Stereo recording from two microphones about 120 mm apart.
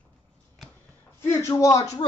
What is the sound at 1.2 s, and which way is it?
Speech, 25° left (ahead or behind).